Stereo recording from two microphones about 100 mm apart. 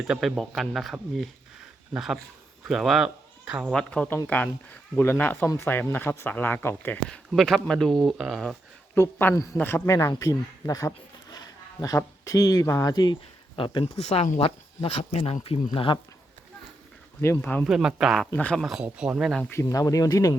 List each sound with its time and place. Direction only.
0.1 s speech: centre (ahead or behind)
2.6 s speech: centre (ahead or behind)
3.7 s speech: 10° left (ahead or behind)
7.3 s speech: 5° left (ahead or behind)
9.0 s speech: 20° left (ahead or behind); by 13.1 s 40° left (ahead or behind)
13.6 s speech: 60° left (ahead or behind)
14.0 s speech: 90° left; by 16.0 s 60° left (ahead or behind)
17.6 s speech: 5° right (ahead or behind)
18.3 s speech: 15° left (ahead or behind)
18.6 s speech: 5° right (ahead or behind)
19.6 s speech: 40° left (ahead or behind)